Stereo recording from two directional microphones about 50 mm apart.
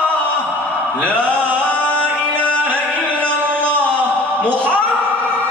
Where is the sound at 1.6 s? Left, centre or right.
Left.